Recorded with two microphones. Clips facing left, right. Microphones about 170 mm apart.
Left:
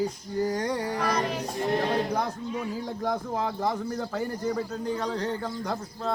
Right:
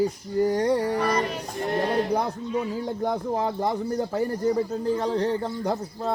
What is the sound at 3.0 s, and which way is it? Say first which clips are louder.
Speech: right 2 dB; 30° right (ahead or behind).